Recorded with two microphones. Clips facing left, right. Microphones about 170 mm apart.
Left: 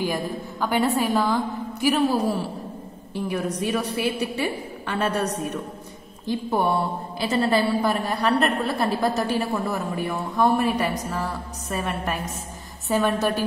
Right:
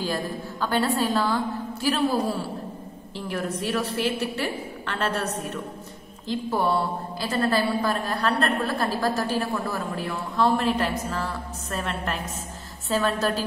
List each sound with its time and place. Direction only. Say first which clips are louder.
0.0 s a woman's voice: left 2 dB; 15° left (ahead or behind)
3.2 s a woman's voice: left 3 dB; 15° left (ahead or behind)